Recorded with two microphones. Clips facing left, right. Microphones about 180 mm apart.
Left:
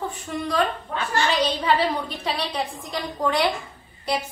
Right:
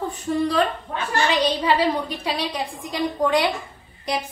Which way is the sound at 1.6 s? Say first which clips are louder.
Right 2 dB; 10° right (ahead or behind).